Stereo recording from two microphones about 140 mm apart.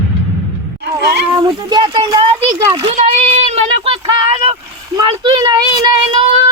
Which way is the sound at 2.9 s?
55° right (ahead or behind).